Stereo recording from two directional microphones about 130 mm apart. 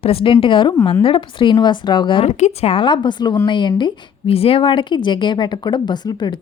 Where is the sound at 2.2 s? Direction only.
60° left (ahead or behind).